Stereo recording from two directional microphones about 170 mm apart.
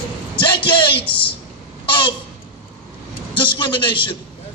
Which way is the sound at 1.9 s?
30° left (ahead or behind).